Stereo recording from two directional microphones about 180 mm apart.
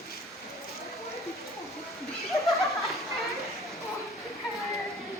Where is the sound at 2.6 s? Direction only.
Centre (ahead or behind).